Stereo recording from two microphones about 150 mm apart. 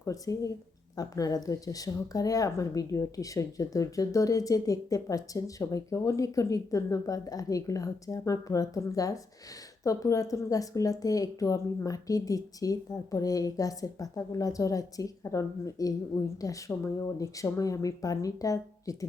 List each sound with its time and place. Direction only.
0.0 s speech: 20° left (ahead or behind)